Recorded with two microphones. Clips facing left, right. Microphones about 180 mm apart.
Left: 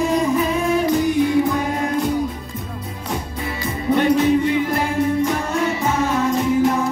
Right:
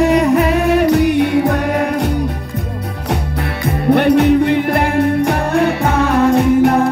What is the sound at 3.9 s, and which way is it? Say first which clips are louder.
Music: right 5 dB; 65° right (ahead or behind).